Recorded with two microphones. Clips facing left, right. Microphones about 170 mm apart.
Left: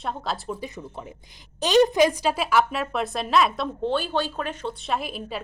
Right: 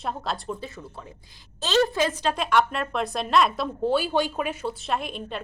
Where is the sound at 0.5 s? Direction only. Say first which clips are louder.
Left 3 dB; 15° left (ahead or behind).